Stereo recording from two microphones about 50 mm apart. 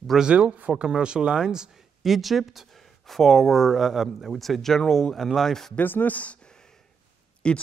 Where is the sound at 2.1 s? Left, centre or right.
Centre.